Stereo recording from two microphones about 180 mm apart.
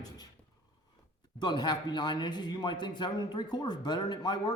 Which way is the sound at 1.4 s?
25° left (ahead or behind).